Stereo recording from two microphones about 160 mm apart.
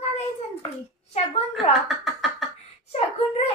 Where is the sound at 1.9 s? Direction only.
Centre (ahead or behind).